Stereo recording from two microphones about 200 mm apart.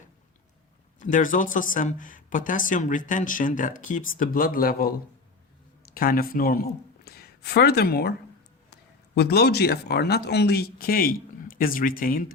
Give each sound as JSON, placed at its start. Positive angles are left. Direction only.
{"t": 0.9, "sound": "speech", "side_deg": 40}
{"t": 5.9, "sound": "a man's voice", "side_deg": 45}